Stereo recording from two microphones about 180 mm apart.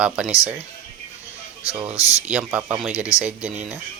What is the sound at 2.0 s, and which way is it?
Speech, 20° left (ahead or behind).